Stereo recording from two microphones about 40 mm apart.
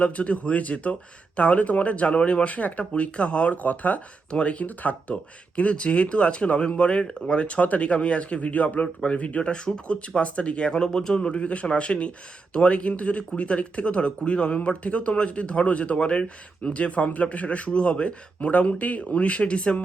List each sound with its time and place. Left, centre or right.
0.0 s speech: left
4.3 s speech: left
4.6 s speech: left; by 11.2 s centre
11.2 s speech: left